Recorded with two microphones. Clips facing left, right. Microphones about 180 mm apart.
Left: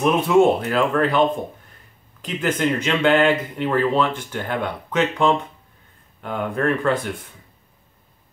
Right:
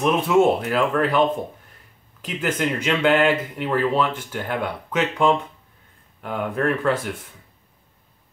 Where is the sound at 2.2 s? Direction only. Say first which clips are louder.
Left 2 dB; 5° right (ahead or behind).